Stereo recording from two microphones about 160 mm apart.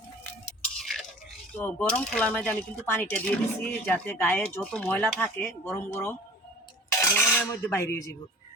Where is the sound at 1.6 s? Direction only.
10° left (ahead or behind).